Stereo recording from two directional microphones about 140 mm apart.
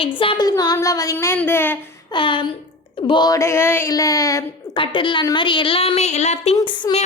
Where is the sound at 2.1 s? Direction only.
35° left (ahead or behind).